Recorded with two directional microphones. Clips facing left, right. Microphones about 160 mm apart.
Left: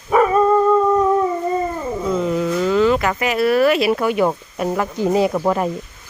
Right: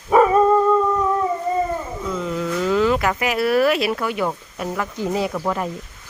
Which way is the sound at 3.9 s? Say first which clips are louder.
Left 6 dB; 20° left (ahead or behind).